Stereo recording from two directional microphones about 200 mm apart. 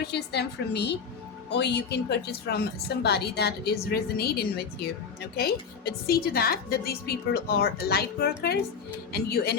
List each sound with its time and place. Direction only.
0.0 s a woman's voice: 55° left (ahead or behind)